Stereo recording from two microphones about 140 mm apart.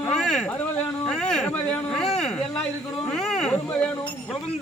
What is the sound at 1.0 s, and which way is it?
Speech, 5° left (ahead or behind).